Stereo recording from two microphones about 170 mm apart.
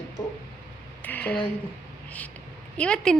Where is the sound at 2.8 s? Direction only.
5° left (ahead or behind).